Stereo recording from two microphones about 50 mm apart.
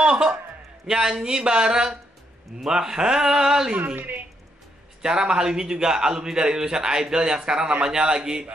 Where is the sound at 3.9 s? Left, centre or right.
Right.